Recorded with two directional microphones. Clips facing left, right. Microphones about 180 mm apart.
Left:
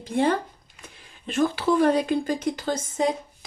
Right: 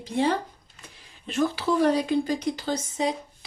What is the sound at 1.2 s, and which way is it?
Speech, 50° left (ahead or behind).